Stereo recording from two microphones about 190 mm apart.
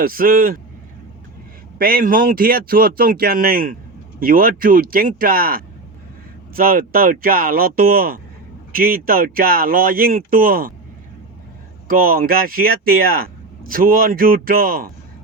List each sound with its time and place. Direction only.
0.0 s speech: 50° right (ahead or behind)
1.8 s speech: 50° right (ahead or behind)
11.9 s speech: 50° right (ahead or behind)